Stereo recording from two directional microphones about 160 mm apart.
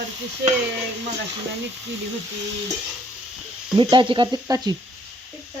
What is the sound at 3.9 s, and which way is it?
Sizzle, 30° right (ahead or behind).